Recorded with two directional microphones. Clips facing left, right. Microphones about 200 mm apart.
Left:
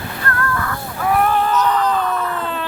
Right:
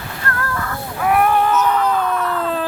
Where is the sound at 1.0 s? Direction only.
10° right (ahead or behind).